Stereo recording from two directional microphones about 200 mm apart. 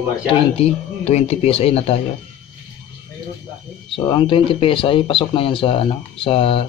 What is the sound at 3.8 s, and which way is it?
Speech, 25° left (ahead or behind).